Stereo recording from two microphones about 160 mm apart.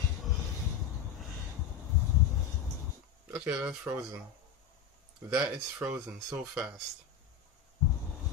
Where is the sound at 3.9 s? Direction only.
25° right (ahead or behind).